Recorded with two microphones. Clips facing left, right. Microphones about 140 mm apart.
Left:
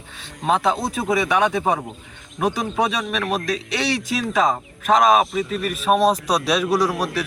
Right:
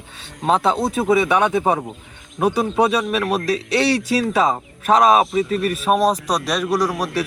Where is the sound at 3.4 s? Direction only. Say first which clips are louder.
Right 5 dB; 30° right (ahead or behind).